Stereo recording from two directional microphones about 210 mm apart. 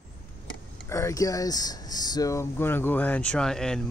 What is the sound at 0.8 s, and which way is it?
Speech, 15° left (ahead or behind).